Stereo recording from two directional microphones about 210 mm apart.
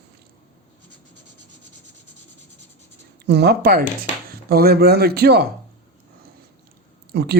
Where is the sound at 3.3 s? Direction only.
50° right (ahead or behind).